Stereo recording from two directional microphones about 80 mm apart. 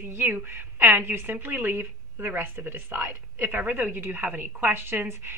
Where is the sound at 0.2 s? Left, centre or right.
Right.